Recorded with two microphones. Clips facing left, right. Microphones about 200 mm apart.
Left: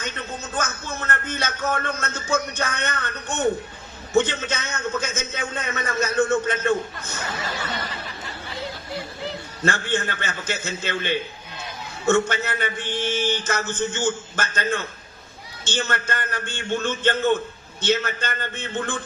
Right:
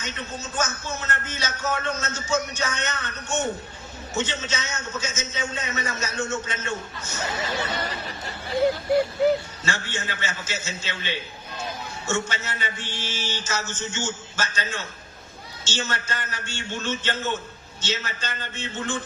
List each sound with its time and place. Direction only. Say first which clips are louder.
0.0 s speech: left 2 dB; 55° left (ahead or behind)
8.5 s a sound: right 13 dB; 55° right (ahead or behind)
9.6 s speech: left 9 dB; 55° left (ahead or behind)